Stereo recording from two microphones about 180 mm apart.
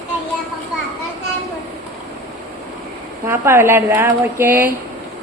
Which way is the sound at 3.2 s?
15° right (ahead or behind).